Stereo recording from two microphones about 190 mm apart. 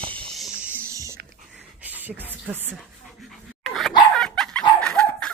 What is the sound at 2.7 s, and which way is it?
Dog, centre (ahead or behind).